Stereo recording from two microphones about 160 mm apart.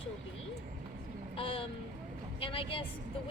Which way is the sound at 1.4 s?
35° left (ahead or behind).